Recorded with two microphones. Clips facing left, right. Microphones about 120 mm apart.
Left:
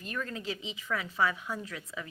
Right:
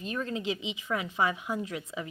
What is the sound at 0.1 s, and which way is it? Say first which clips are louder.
Speech: right 4 dB; 25° right (ahead or behind).